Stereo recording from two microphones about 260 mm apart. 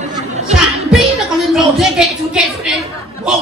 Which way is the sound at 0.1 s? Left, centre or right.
Right.